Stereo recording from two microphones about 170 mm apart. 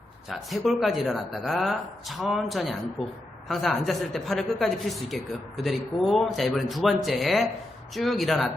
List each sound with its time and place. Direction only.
0.3 s speech: centre (ahead or behind)
3.0 s a woman's voice: 35° left (ahead or behind)
3.5 s speech: centre (ahead or behind)